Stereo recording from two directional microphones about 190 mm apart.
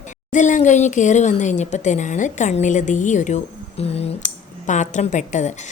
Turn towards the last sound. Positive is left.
turn(degrees=40)  # may be behind; listen again after turning